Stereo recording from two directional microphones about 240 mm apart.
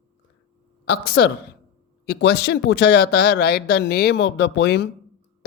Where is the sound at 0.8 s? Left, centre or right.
Left.